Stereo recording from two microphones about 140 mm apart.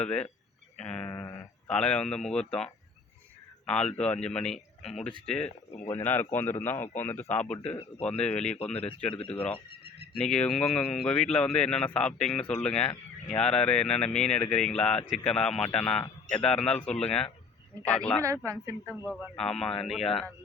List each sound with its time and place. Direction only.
0.0 s speech: 10° left (ahead or behind)
0.8 s sheep: 5° left (ahead or behind)
1.1 s a sound: 20° left (ahead or behind)
1.6 s speech: 5° left (ahead or behind)
3.9 s speech: 5° left (ahead or behind)
8.5 s speech: 45° left (ahead or behind)
9.3 s speech: 15° left (ahead or behind)
18.2 s a woman's voice: 20° right (ahead or behind)
19.4 s speech: 5° left (ahead or behind)